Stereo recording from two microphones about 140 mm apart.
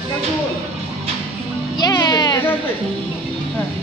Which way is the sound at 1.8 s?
25° left (ahead or behind).